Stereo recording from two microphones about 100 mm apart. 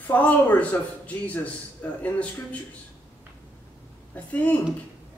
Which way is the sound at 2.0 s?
15° left (ahead or behind).